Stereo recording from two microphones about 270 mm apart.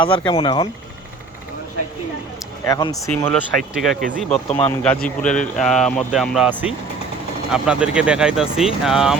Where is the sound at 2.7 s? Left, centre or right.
Centre.